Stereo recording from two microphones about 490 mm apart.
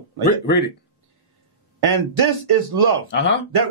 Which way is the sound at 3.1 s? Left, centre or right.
Left.